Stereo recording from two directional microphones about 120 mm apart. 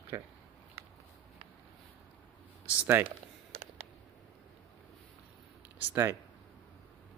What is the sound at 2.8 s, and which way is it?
Speech, 15° right (ahead or behind).